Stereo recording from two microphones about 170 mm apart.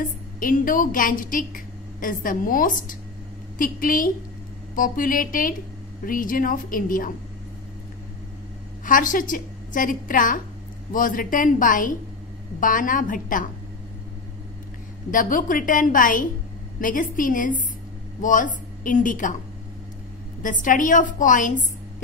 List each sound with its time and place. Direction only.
0.0 s a woman's voice: 55° left (ahead or behind)
8.8 s a woman's voice: 50° left (ahead or behind)
15.0 s a woman's voice: 50° left (ahead or behind)
20.4 s a woman's voice: 50° left (ahead or behind)